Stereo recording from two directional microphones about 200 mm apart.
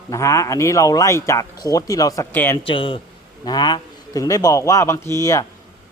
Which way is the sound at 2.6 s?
25° left (ahead or behind).